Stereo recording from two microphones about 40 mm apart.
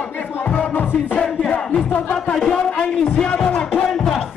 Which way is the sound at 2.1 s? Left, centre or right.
Centre.